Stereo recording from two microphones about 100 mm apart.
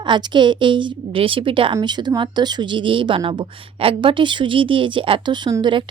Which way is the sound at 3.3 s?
65° right (ahead or behind).